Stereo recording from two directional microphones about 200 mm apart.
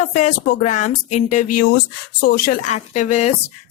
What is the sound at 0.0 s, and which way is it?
A woman's voice, 40° left (ahead or behind).